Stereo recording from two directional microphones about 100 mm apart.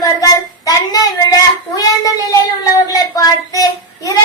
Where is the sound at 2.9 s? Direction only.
35° left (ahead or behind).